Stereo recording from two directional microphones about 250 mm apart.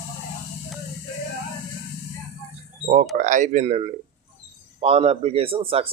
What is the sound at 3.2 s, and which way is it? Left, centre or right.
Speech, right.